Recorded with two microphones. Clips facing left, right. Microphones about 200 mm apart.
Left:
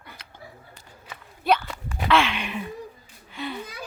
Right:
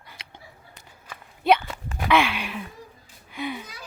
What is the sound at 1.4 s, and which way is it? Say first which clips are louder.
Walk: right 3 dB; 20° right (ahead or behind).